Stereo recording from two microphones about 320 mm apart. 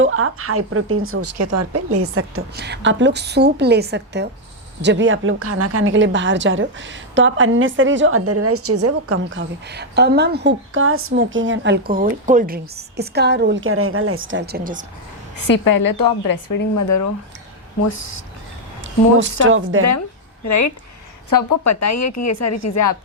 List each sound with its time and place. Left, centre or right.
0.0 s a woman's voice: right
15.5 s a woman's voice: left
16.7 s a woman's voice: left
19.2 s a woman's voice: right
20.4 s a woman's voice: left